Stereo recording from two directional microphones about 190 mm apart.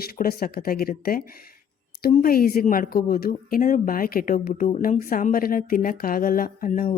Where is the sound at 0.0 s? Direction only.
50° left (ahead or behind).